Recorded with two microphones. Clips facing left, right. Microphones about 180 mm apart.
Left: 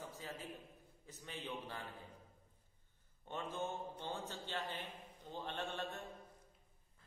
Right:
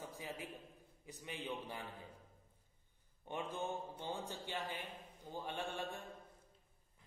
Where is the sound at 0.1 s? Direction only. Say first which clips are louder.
Right 2 dB; 15° right (ahead or behind).